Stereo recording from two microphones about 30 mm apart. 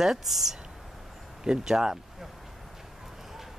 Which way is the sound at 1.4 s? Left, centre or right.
Right.